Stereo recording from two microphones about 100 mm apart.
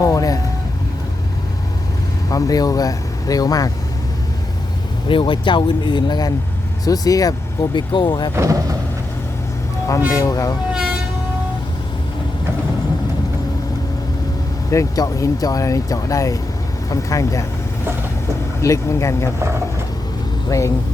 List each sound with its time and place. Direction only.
0.0 s vehicle: 35° left (ahead or behind)
2.3 s speech: 35° left (ahead or behind)
5.0 s speech: 55° left (ahead or behind)
8.4 s speech: 35° right (ahead or behind)
10.2 s speech: 35° left (ahead or behind)
14.7 s speech: 35° left (ahead or behind)
18.6 s speech: 30° left (ahead or behind)
20.5 s speech: 30° left (ahead or behind)